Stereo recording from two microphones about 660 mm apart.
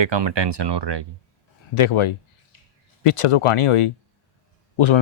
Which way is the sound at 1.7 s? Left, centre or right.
Left.